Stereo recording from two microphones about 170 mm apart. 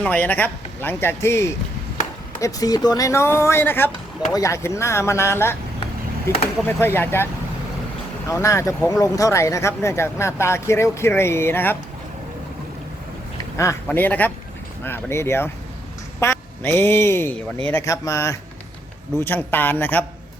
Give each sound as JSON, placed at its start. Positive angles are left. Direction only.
{"t": 0.0, "sound": "speech", "side_deg": 10}
{"t": 8.3, "sound": "speech", "side_deg": 15}
{"t": 13.8, "sound": "speech", "side_deg": 10}